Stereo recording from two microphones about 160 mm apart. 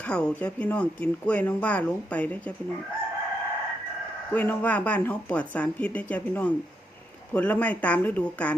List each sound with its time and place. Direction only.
0.1 s speech: 5° left (ahead or behind)
4.3 s speech: 10° left (ahead or behind)